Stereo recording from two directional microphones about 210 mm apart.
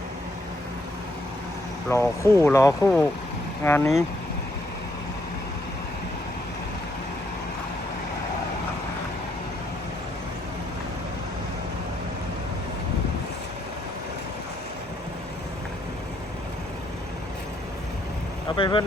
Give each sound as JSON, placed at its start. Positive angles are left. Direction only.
{"t": 1.9, "sound": "speech", "side_deg": 15}
{"t": 18.5, "sound": "speech", "side_deg": 25}